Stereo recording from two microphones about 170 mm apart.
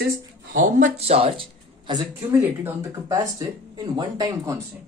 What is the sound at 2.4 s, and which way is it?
Speech, 15° right (ahead or behind).